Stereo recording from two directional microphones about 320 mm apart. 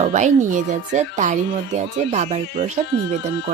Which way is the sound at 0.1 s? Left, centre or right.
Right.